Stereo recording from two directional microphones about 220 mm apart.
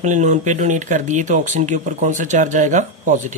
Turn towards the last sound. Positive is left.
turn(degrees=-35)  # may be behind; listen again after turning